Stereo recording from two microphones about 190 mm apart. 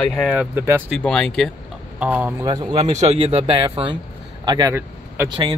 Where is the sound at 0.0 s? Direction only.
Centre (ahead or behind).